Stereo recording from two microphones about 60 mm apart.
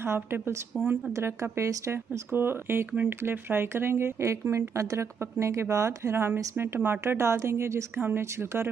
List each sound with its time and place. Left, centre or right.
0.0 s a woman's voice: right
1.1 s speech: right
2.3 s a woman's voice: right
6.1 s a woman's voice: right